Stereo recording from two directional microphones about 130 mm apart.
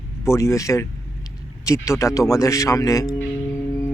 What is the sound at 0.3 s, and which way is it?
Speech, 20° left (ahead or behind).